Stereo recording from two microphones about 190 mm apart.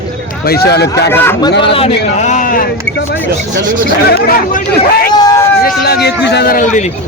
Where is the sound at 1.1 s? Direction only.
10° left (ahead or behind).